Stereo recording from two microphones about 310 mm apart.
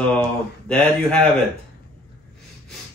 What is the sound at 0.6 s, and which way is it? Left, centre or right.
Speech, centre.